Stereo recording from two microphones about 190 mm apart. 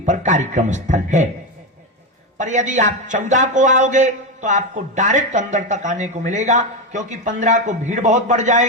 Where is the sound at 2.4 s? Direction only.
40° right (ahead or behind).